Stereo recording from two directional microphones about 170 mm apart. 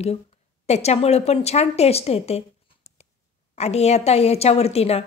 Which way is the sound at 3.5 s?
40° left (ahead or behind).